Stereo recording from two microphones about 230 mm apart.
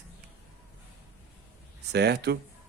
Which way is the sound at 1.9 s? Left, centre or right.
Right.